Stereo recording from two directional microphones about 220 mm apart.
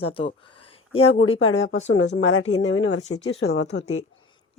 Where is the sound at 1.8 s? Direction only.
60° left (ahead or behind).